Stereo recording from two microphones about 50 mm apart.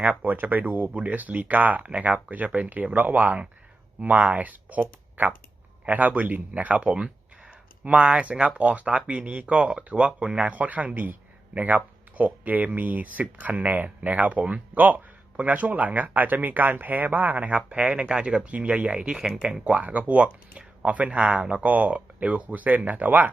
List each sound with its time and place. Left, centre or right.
0.0 s speech: right
0.3 s speech: right
5.8 s speech: right
10.5 s speech: right
17.7 s speech: right
19.1 s speech: centre; by 23.3 s right